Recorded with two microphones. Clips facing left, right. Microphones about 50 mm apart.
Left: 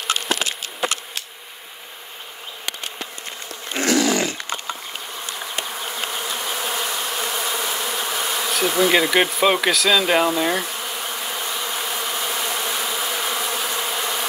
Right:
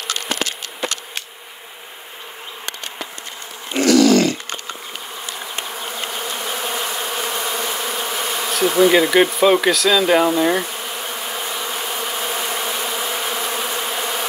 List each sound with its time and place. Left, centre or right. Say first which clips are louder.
0.1 s insect: left 1 dB; left
3.8 s a sound: right 6 dB; left
5.7 s bee: right 1 dB; centre